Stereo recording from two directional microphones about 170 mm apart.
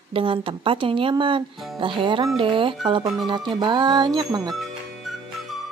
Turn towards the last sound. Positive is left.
turn(degrees=-25)  # may be behind; listen again after turning